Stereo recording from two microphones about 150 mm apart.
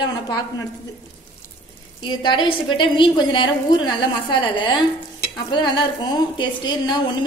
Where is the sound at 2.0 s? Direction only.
30° left (ahead or behind).